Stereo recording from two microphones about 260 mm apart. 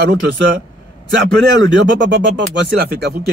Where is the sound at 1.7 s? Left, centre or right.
Right.